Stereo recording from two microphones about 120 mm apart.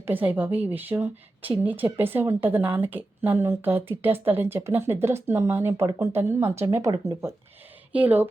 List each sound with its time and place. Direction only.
0.0 s a woman's voice: 15° right (ahead or behind)
7.9 s a woman's voice: 15° right (ahead or behind)